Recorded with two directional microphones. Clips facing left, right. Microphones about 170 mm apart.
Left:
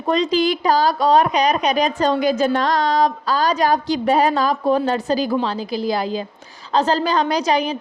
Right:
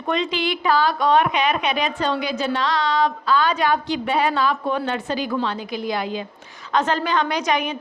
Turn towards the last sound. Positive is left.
turn(degrees=35)  # may be behind; listen again after turning